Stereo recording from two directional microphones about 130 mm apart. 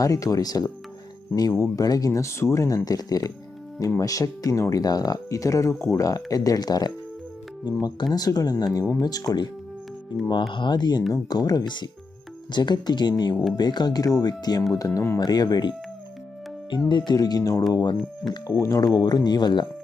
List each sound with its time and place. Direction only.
0.0 s speech: 25° left (ahead or behind)
10.5 s speech: 35° left (ahead or behind)
17.1 s speech: 30° left (ahead or behind)